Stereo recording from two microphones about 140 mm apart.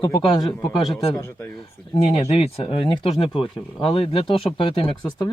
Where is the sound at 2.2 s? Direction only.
45° left (ahead or behind).